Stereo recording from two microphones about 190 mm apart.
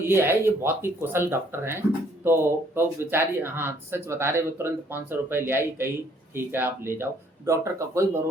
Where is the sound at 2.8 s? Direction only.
10° right (ahead or behind).